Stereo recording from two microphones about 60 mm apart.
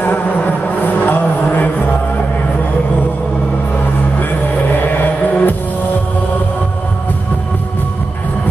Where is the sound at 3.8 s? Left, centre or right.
Left.